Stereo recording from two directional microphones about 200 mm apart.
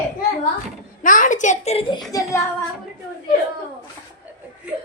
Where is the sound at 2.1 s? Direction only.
15° left (ahead or behind).